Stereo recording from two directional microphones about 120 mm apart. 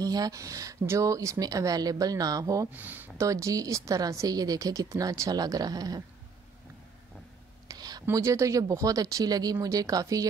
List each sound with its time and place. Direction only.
0.0 s speech: 30° right (ahead or behind)
2.7 s speech: 15° right (ahead or behind)
3.2 s speech: 25° right (ahead or behind)
7.6 s a sound: 35° right (ahead or behind)
8.0 s speech: 25° right (ahead or behind)